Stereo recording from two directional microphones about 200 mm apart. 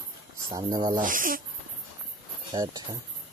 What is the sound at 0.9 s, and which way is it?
Speech, 45° right (ahead or behind).